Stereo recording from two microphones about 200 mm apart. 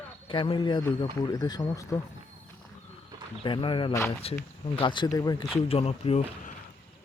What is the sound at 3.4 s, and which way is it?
Speech, 25° left (ahead or behind).